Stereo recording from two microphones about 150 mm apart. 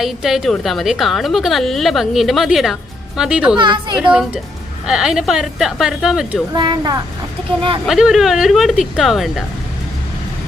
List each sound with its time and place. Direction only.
0.0 s a woman's voice: centre (ahead or behind)
3.6 s a woman's voice: 30° right (ahead or behind)
4.9 s a woman's voice: 5° right (ahead or behind)
6.5 s a woman's voice: 30° right (ahead or behind)
7.9 s a woman's voice: centre (ahead or behind)